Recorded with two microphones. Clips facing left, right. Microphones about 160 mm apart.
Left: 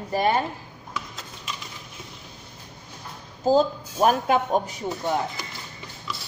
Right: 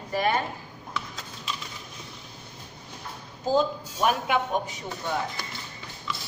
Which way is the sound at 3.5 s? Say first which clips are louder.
Left 4 dB; 40° left (ahead or behind).